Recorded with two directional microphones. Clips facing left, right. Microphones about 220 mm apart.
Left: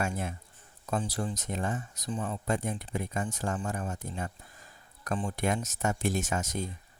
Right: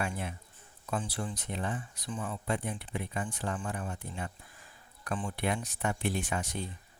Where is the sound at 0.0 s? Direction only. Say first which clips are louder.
Left 3 dB; 45° left (ahead or behind).